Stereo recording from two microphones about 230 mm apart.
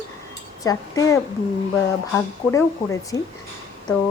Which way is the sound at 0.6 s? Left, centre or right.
Centre.